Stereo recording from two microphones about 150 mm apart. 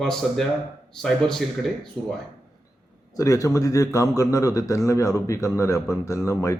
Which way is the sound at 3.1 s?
20° left (ahead or behind).